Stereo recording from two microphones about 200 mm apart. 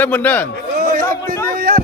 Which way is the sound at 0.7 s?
45° right (ahead or behind).